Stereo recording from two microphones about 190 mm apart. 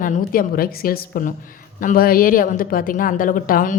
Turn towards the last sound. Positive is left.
turn(degrees=45)  # may be behind; listen again after turning